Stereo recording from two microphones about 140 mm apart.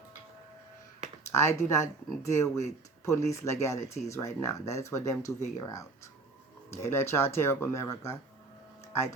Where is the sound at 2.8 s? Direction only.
20° left (ahead or behind).